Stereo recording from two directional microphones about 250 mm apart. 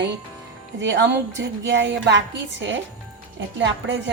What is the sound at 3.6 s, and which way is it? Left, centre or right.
Speech, right.